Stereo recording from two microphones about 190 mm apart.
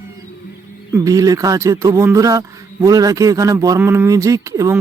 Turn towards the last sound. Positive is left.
turn(degrees=-15)  # may be behind; listen again after turning